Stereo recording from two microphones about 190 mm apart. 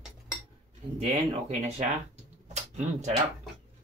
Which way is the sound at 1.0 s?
35° right (ahead or behind).